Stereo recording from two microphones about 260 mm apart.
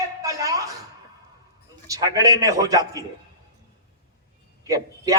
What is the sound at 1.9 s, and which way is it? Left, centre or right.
A man's voice, centre.